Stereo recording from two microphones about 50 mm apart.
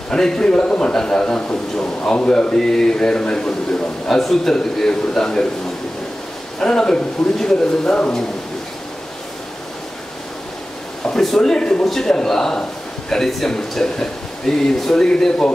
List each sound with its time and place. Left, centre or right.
0.1 s a man's voice: centre
6.6 s a man's voice: centre
7.8 s speech: centre
11.1 s a man's voice: centre